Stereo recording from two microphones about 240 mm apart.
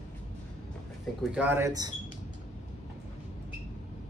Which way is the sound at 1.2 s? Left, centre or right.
Centre.